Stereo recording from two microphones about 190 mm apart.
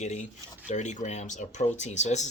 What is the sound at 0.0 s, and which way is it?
A man's voice, 35° left (ahead or behind).